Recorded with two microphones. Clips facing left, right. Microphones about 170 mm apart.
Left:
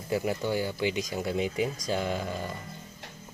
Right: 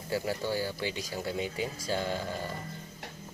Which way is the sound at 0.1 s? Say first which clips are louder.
Left 3 dB; 20° left (ahead or behind).